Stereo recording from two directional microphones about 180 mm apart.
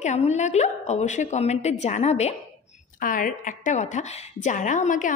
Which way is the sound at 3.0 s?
45° left (ahead or behind).